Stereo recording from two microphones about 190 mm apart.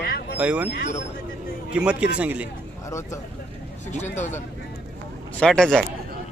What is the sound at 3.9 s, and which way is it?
Speech, 40° left (ahead or behind).